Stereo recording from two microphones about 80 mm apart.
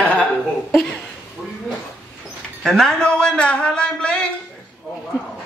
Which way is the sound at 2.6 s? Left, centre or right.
Centre.